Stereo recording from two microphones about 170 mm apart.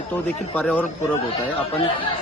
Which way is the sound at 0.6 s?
5° left (ahead or behind).